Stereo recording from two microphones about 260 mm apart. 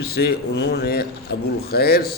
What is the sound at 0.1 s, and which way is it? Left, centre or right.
A man's voice, left.